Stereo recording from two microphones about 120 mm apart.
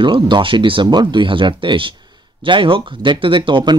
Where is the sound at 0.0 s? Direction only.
45° right (ahead or behind).